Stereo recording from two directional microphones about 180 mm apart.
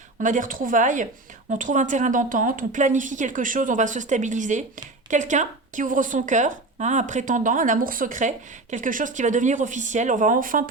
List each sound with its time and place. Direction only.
0.2 s a woman's voice: 45° right (ahead or behind)